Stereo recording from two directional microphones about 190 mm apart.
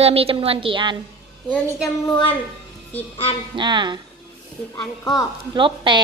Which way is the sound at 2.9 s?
30° left (ahead or behind).